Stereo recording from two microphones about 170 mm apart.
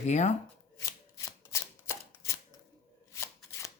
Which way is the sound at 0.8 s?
20° left (ahead or behind).